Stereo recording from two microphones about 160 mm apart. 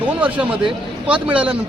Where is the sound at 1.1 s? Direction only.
10° right (ahead or behind).